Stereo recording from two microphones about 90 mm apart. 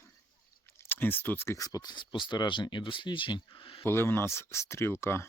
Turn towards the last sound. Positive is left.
turn(degrees=30)  # may be behind; listen again after turning